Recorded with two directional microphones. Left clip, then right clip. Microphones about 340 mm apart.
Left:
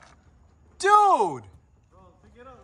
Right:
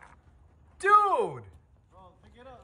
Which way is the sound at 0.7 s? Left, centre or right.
Centre.